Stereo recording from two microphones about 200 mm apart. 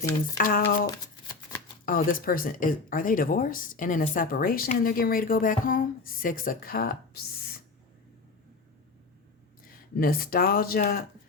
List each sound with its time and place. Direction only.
0.3 s speech: 45° left (ahead or behind)
0.9 s shuffling cards: 20° left (ahead or behind)
1.8 s speech: 45° left (ahead or behind)
10.0 s speech: 45° left (ahead or behind)